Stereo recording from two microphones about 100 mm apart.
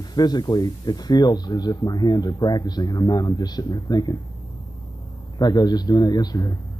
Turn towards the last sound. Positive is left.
turn(degrees=40)  # may be behind; listen again after turning